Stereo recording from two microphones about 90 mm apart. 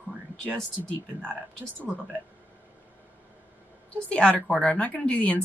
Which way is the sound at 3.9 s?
15° left (ahead or behind).